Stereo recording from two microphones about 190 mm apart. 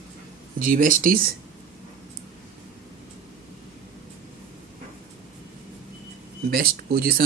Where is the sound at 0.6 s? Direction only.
45° right (ahead or behind).